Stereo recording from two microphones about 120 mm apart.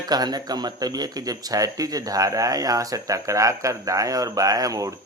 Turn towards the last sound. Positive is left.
turn(degrees=-30)  # may be behind; listen again after turning